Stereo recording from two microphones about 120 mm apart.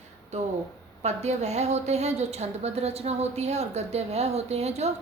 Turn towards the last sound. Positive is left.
turn(degrees=-65)  # may be behind; listen again after turning